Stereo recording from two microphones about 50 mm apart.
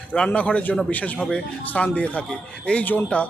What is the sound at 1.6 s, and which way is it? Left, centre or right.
A man's voice, left.